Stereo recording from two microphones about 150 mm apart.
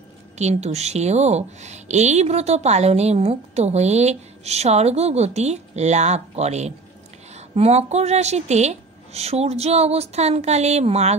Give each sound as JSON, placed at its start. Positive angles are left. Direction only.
{"t": 0.4, "sound": "a woman's voice", "side_deg": -45}